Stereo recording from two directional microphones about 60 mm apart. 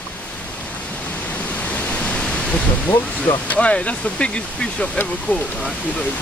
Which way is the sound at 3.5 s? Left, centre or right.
Left.